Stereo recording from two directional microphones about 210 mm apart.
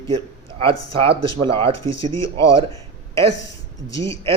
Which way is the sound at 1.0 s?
25° right (ahead or behind).